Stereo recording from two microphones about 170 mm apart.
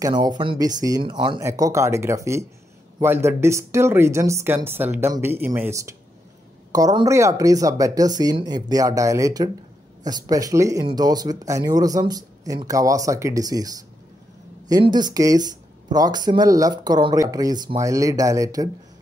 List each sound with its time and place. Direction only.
0.0 s speech: 25° right (ahead or behind)
14.7 s speech: 25° right (ahead or behind)